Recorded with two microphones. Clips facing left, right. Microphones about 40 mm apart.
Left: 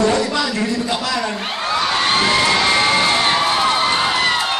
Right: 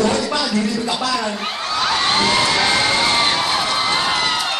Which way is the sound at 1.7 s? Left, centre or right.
Left.